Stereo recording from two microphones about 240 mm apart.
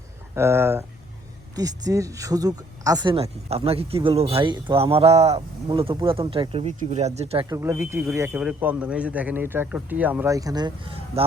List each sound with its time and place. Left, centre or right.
0.3 s speech: centre; by 7.4 s right
7.5 s speech: centre